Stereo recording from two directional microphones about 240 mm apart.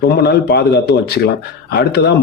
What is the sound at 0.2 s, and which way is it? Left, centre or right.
Speech, left.